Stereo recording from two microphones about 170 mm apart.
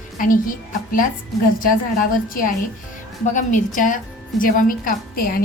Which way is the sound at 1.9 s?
55° left (ahead or behind).